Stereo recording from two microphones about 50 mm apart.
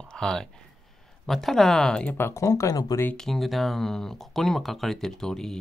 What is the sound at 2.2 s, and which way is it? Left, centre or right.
Speech, left.